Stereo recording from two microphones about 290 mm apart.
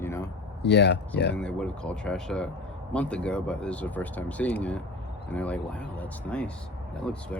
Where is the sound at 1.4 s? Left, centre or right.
Centre.